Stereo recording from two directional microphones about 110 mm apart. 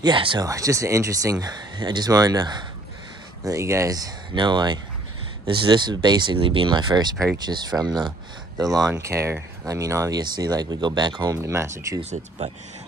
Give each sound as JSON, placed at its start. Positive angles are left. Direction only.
{"t": 0.0, "sound": "speech", "side_deg": -50}
{"t": 0.4, "sound": "speech", "side_deg": -30}
{"t": 11.3, "sound": "speech", "side_deg": -25}
{"t": 12.0, "sound": "speech", "side_deg": -75}